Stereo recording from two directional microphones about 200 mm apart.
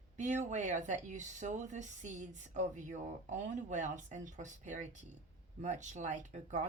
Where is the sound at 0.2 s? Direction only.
35° right (ahead or behind).